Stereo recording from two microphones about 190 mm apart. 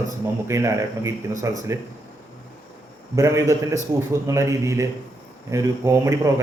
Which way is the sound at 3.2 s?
15° right (ahead or behind).